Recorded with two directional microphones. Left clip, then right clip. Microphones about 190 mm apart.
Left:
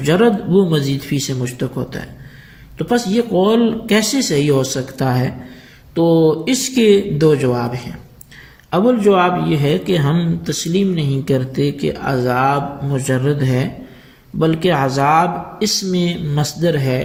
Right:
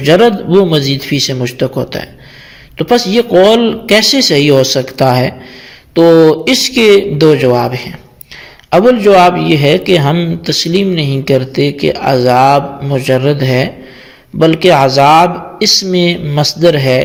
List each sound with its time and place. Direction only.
0.0 s a man's voice: 35° right (ahead or behind)